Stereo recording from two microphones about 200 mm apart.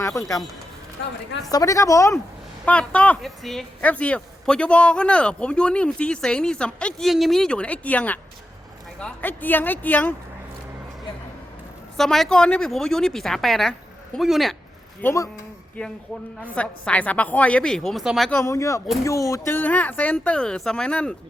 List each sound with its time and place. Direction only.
0.0 s speech: 15° left (ahead or behind)
1.5 s speech: 15° left (ahead or behind)
11.9 s speech: centre (ahead or behind)
15.0 s speech: 15° left (ahead or behind); by 18.3 s centre (ahead or behind)
18.3 s speech: 15° left (ahead or behind)